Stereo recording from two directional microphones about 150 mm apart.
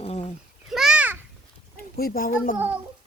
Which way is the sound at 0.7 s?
5° right (ahead or behind).